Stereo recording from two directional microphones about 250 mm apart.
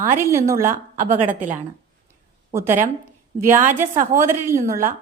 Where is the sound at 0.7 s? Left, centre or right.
Right.